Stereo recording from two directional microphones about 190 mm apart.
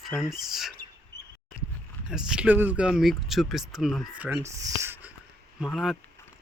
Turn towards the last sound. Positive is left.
turn(degrees=0)  # may be behind; listen again after turning